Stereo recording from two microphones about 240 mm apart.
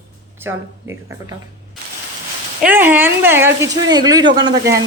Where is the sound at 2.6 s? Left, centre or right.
Centre.